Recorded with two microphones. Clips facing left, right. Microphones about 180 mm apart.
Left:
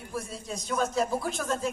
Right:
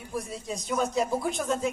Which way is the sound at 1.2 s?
20° right (ahead or behind).